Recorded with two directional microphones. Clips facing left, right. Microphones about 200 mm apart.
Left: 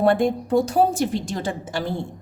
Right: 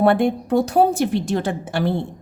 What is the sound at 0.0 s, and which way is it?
A woman's voice, 60° right (ahead or behind).